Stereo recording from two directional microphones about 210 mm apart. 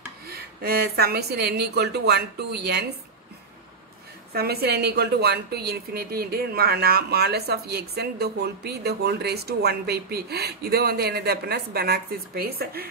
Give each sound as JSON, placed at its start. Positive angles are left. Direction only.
{"t": 0.3, "sound": "speech", "side_deg": -50}
{"t": 4.3, "sound": "speech", "side_deg": -50}